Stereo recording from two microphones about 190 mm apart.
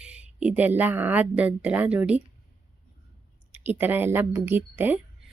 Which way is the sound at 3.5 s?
10° right (ahead or behind).